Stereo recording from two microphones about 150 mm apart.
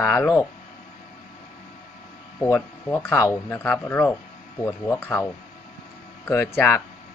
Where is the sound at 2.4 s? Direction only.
15° left (ahead or behind).